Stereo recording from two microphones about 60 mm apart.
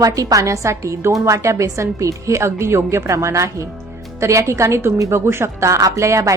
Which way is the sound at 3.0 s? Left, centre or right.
Right.